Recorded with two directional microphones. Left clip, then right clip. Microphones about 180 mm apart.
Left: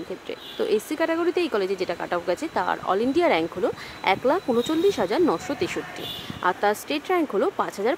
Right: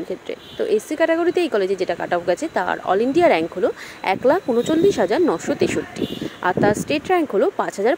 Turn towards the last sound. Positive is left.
turn(degrees=-15)  # may be behind; listen again after turning